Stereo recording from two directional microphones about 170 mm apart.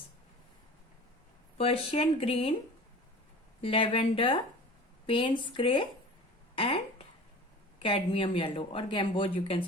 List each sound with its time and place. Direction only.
1.5 s speech: 35° left (ahead or behind)
3.6 s a woman's voice: 35° left (ahead or behind)
7.8 s speech: 30° left (ahead or behind)